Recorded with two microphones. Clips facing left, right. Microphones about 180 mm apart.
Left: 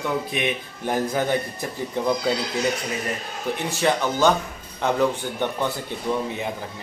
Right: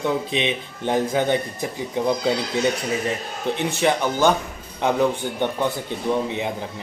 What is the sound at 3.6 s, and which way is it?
Speech, 15° right (ahead or behind).